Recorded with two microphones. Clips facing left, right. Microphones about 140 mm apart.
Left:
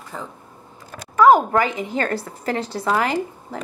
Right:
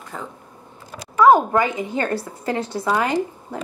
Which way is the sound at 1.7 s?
20° right (ahead or behind).